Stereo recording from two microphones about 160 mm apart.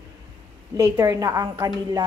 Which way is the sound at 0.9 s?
20° right (ahead or behind).